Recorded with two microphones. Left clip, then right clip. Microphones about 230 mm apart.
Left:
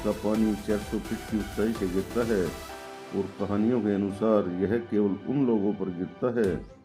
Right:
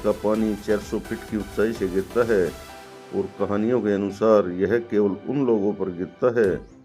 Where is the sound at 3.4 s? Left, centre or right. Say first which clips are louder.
Right 5 dB; right.